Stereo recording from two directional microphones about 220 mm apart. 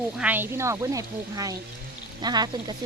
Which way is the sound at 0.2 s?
10° right (ahead or behind).